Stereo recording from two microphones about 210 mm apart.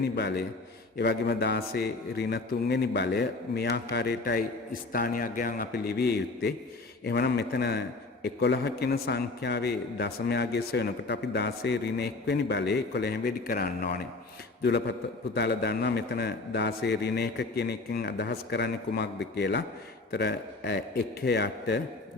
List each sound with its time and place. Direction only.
0.2 s a man's voice: 55° left (ahead or behind)